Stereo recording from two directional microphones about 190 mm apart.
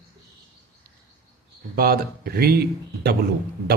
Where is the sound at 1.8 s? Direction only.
50° right (ahead or behind).